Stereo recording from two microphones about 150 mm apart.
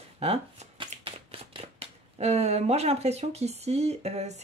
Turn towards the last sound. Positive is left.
turn(degrees=-45)  # may be behind; listen again after turning